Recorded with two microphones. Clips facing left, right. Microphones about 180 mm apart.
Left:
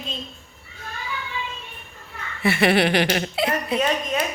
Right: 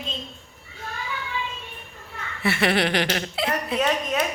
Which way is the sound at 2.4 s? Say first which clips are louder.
Left 4 dB; 10° left (ahead or behind).